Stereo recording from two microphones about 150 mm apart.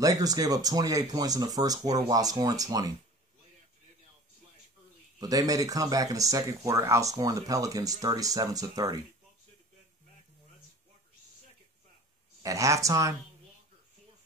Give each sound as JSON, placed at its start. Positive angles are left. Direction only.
{"t": 0.0, "sound": "speech", "side_deg": -25}
{"t": 5.2, "sound": "speech", "side_deg": -25}
{"t": 12.4, "sound": "speech", "side_deg": -20}